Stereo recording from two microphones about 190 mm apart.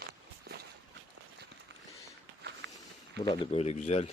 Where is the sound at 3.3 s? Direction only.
30° left (ahead or behind).